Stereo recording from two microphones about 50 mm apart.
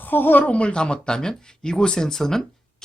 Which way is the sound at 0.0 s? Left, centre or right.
Left.